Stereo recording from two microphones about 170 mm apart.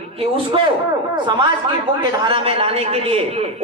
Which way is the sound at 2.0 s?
30° right (ahead or behind).